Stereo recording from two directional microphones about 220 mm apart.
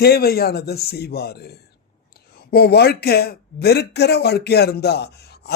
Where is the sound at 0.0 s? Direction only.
45° left (ahead or behind).